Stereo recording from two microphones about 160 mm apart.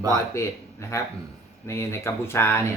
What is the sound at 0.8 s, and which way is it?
Speech, 15° left (ahead or behind).